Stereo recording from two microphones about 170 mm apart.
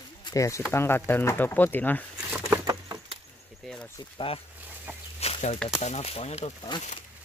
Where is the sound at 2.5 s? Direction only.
20° right (ahead or behind).